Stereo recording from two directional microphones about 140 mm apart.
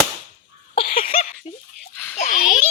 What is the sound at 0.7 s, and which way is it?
Cough, 45° left (ahead or behind).